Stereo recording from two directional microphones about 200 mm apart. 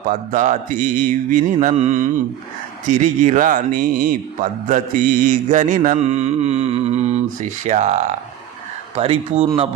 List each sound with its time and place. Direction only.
0.1 s mantra: 40° right (ahead or behind)
9.0 s speech: 30° right (ahead or behind)